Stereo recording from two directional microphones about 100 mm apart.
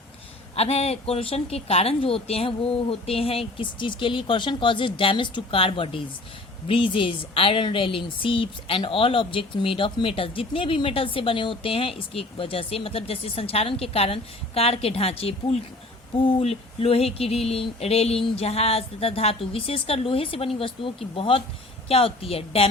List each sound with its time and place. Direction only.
0.5 s speech: 90° left
16.2 s a sound: 75° left (ahead or behind)
18.3 s a woman's voice: 90° left